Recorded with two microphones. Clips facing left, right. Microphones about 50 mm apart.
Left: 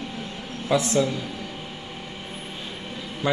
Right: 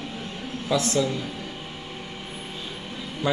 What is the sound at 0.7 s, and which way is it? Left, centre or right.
Speech, left.